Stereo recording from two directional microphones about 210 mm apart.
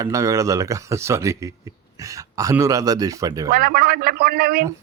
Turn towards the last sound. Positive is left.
turn(degrees=-50)  # may be behind; listen again after turning